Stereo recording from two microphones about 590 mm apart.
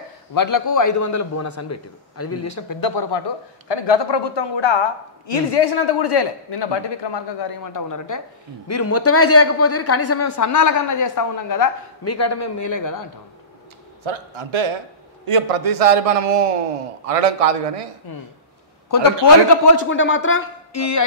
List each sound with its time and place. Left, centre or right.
0.3 s a woman's voice: left
14.0 s a man's voice: right
18.1 s a woman's voice: left
19.9 s a woman's voice: centre